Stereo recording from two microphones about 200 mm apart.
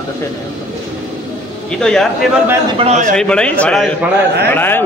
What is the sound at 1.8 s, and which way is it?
Speech, 5° left (ahead or behind).